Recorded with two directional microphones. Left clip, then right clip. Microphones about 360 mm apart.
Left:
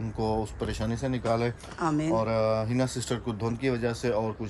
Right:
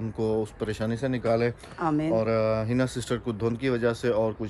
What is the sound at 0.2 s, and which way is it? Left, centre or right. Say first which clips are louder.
Speech: right 2 dB; centre.